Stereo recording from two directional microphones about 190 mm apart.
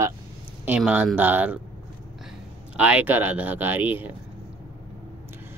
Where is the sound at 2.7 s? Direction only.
10° right (ahead or behind).